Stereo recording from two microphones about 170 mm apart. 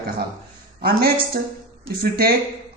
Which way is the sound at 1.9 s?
65° right (ahead or behind).